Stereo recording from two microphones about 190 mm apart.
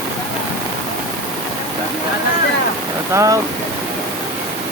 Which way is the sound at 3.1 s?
15° right (ahead or behind).